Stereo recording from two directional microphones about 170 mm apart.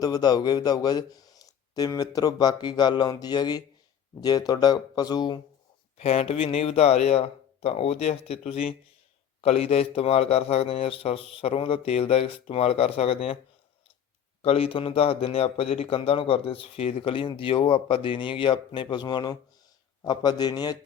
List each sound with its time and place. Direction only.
0.0 s a man's voice: 25° left (ahead or behind)
6.0 s speech: 35° left (ahead or behind)
14.4 s a man's voice: 35° left (ahead or behind)